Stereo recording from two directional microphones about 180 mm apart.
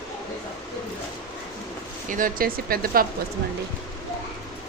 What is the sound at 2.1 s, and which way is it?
Speech, 50° right (ahead or behind).